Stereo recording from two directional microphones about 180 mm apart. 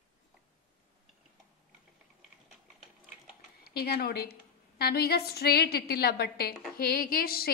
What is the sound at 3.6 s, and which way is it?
A woman's voice, 60° left (ahead or behind).